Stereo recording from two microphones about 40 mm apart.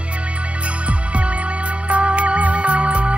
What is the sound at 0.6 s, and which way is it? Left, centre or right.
Music, right.